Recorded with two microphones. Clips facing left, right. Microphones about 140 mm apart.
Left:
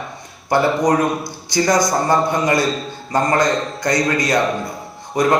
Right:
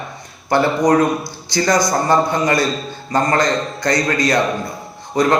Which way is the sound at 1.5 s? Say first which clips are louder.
Even; 20° left (ahead or behind).